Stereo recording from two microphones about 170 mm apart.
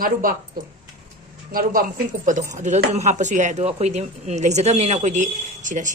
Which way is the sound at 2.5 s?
45° right (ahead or behind).